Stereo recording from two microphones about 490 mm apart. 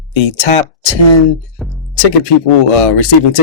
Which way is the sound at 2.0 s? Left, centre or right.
Left.